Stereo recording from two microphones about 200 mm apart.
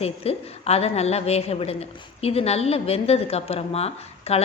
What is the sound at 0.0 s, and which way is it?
A woman's voice, 30° left (ahead or behind).